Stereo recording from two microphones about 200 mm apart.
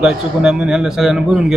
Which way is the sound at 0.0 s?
5° right (ahead or behind).